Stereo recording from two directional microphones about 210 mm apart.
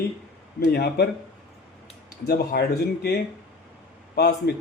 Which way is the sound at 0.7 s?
50° left (ahead or behind).